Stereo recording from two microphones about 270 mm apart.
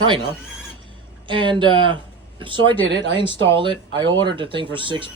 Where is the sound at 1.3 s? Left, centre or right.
Centre.